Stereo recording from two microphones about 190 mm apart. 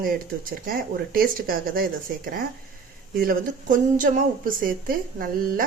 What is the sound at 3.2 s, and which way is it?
Speech, 45° right (ahead or behind).